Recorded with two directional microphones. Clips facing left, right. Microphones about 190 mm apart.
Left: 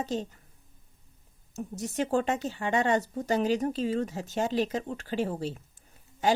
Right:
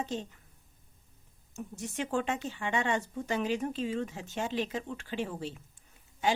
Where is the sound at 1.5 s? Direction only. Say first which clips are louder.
Left 5 dB; 35° left (ahead or behind).